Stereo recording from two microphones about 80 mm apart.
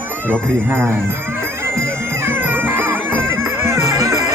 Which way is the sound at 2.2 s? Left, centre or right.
Right.